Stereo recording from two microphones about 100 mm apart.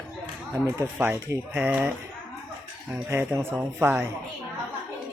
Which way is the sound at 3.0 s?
25° right (ahead or behind).